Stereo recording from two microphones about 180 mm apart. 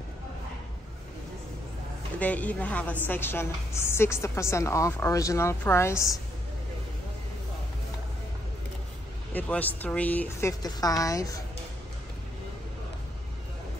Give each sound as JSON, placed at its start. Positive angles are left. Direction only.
{"t": 2.1, "sound": "a woman's voice", "side_deg": 10}
{"t": 9.3, "sound": "a woman's voice", "side_deg": 10}
{"t": 10.6, "sound": "a woman's voice", "side_deg": 20}